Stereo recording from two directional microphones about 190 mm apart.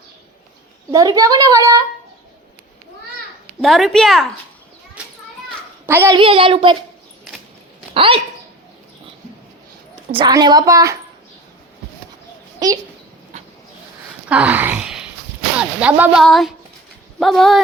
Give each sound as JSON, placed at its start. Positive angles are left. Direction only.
{"t": 0.9, "sound": "speech", "side_deg": -20}
{"t": 3.6, "sound": "a woman's voice", "side_deg": 0}
{"t": 5.0, "sound": "children playing", "side_deg": -5}
{"t": 5.8, "sound": "a child's voice", "side_deg": -15}
{"t": 6.1, "sound": "speech", "side_deg": -30}
{"t": 7.9, "sound": "speech", "side_deg": -30}
{"t": 10.2, "sound": "speech", "side_deg": -20}
{"t": 12.5, "sound": "a sound", "side_deg": -20}
{"t": 14.3, "sound": "gasp", "side_deg": -5}
{"t": 15.5, "sound": "a woman's voice", "side_deg": -5}